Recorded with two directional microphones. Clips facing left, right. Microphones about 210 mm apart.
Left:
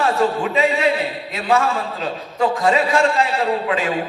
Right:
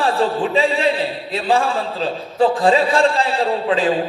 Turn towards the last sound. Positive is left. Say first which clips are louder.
# right 2 dB
turn(degrees=-30)  # may be behind; listen again after turning